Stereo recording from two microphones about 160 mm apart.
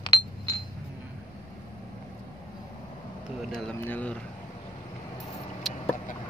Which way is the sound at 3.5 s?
10° left (ahead or behind).